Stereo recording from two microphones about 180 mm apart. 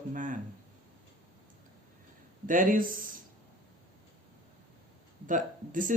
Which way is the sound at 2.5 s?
50° right (ahead or behind).